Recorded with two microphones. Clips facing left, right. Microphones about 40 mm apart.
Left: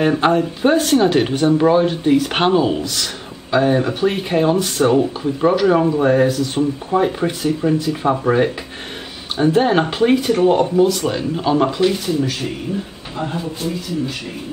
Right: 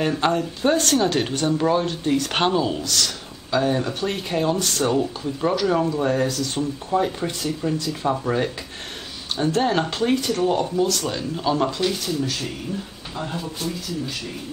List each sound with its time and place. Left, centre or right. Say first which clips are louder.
0.0 s speech: left 6 dB; centre